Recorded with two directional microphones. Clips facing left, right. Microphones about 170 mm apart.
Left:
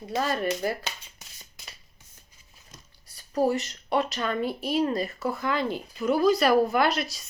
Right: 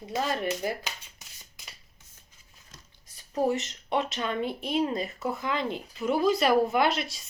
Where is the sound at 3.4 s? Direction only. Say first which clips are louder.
Left 2 dB; 25° right (ahead or behind).